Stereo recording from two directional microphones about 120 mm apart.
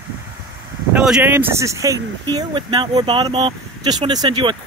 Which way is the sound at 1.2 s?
15° right (ahead or behind).